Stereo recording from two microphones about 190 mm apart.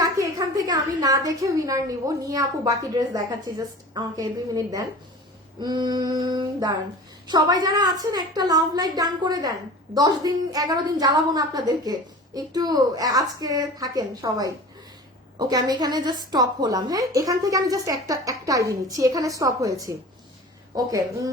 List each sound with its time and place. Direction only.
0.0 s a woman's voice: 20° right (ahead or behind)